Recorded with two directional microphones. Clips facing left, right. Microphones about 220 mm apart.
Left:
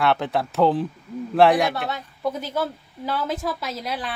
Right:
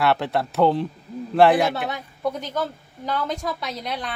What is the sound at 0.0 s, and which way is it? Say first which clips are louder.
Speech: even; centre (ahead or behind).